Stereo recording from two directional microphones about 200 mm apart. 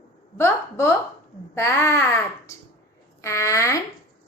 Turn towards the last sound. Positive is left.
turn(degrees=15)  # may be behind; listen again after turning